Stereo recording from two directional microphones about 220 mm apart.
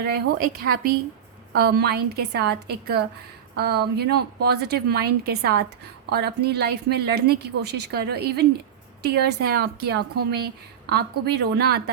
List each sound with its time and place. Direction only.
0.0 s a woman's voice: 45° right (ahead or behind)